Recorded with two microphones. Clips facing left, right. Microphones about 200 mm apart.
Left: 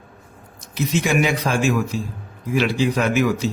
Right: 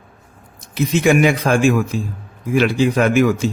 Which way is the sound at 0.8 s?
55° right (ahead or behind).